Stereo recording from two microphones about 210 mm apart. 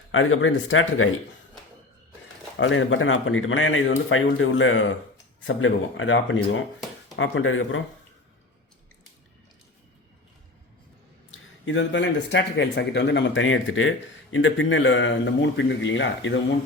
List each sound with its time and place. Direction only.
0.1 s speech: 70° left (ahead or behind)
2.6 s speech: 65° left (ahead or behind)
11.6 s speech: 65° left (ahead or behind)